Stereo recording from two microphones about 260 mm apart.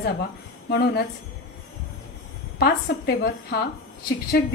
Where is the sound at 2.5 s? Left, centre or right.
Left.